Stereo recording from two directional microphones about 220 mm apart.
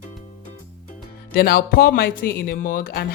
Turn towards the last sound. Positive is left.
turn(degrees=40)  # may be behind; listen again after turning